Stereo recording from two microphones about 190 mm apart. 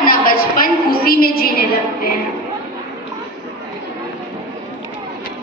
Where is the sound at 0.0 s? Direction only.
50° left (ahead or behind).